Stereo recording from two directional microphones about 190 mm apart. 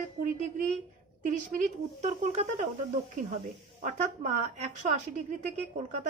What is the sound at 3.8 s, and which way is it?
Speech, 40° right (ahead or behind).